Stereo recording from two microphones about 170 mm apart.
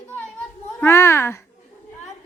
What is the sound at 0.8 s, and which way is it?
Speech, 15° left (ahead or behind).